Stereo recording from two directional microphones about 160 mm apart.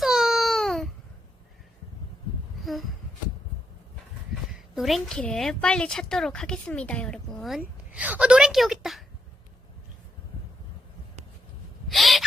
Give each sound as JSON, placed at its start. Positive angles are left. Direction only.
{"t": 0.0, "sound": "baby cry", "side_deg": 0}
{"t": 4.7, "sound": "a woman's voice", "side_deg": 0}
{"t": 7.6, "sound": "a woman's voice", "side_deg": -10}
{"t": 11.9, "sound": "owl", "side_deg": 0}